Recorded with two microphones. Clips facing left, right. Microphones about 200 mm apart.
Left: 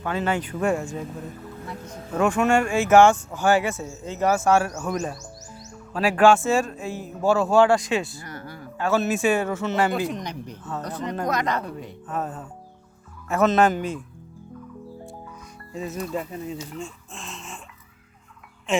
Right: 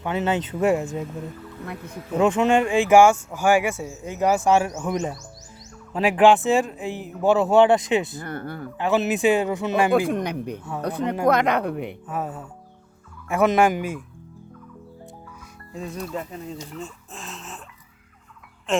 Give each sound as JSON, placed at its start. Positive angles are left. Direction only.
{"t": 0.0, "sound": "speech", "side_deg": -20}
{"t": 1.6, "sound": "speech", "side_deg": -60}
{"t": 2.1, "sound": "speech", "side_deg": -20}
{"t": 8.2, "sound": "speech", "side_deg": -55}
{"t": 8.8, "sound": "speech", "side_deg": -15}
{"t": 10.1, "sound": "speech", "side_deg": -60}
{"t": 10.6, "sound": "speech", "side_deg": -10}
{"t": 11.3, "sound": "speech", "side_deg": -60}
{"t": 12.0, "sound": "speech", "side_deg": -10}
{"t": 15.7, "sound": "speech", "side_deg": 0}
{"t": 16.7, "sound": "a sound", "side_deg": -5}